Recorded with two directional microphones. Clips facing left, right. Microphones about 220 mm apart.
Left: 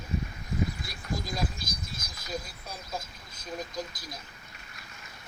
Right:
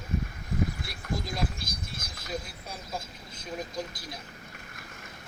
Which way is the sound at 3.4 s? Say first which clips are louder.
Right 1 dB; 5° right (ahead or behind).